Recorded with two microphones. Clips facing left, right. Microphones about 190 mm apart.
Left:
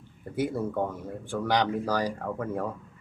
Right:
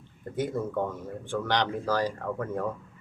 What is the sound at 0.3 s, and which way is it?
Speech, 10° left (ahead or behind).